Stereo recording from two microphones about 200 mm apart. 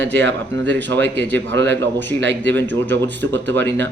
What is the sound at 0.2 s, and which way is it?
Speech, 65° right (ahead or behind).